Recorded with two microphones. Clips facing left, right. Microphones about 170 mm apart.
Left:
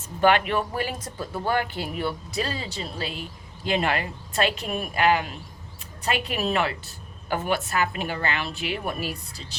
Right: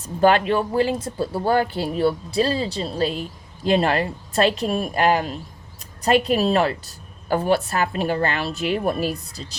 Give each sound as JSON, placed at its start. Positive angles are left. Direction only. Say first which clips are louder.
{"t": 0.2, "sound": "speech", "louder": "right 4 dB", "side_deg": -35}